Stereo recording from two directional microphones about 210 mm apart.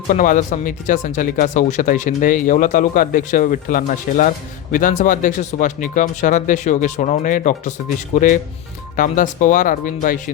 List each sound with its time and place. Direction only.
0.1 s speech: 40° left (ahead or behind)